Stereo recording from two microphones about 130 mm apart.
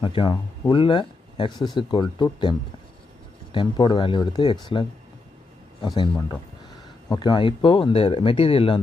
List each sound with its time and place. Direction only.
0.0 s speech: 40° left (ahead or behind)
3.5 s speech: 40° left (ahead or behind)